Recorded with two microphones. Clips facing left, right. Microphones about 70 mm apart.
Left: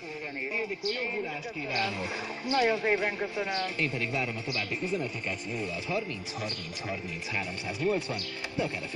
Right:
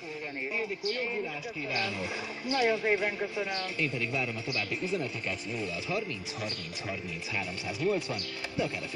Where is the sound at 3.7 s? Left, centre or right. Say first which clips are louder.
Left 1 dB; left.